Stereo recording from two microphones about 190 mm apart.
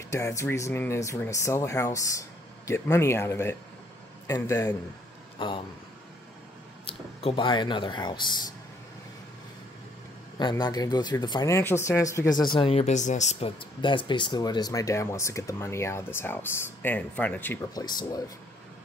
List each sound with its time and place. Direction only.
0.1 s speech: 15° left (ahead or behind)
6.9 s speech: 30° left (ahead or behind)
10.4 s speech: 20° left (ahead or behind)
12.5 s speech: 30° left (ahead or behind)
13.7 s speech: 25° left (ahead or behind)
17.8 s speech: 20° left (ahead or behind)